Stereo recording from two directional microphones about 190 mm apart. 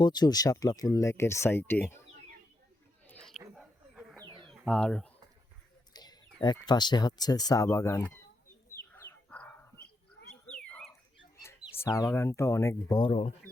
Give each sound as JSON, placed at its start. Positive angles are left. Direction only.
{"t": 0.0, "sound": "speech", "side_deg": 20}
{"t": 3.1, "sound": "a sound", "side_deg": 5}
{"t": 4.4, "sound": "bird", "side_deg": 0}
{"t": 5.9, "sound": "speech", "side_deg": 20}
{"t": 8.9, "sound": "bird", "side_deg": 10}
{"t": 11.8, "sound": "speech", "side_deg": 20}